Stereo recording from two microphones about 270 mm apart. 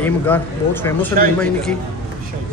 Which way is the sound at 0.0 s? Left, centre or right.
Centre.